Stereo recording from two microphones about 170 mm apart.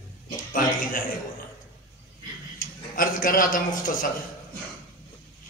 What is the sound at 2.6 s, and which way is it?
A man's voice, 55° left (ahead or behind).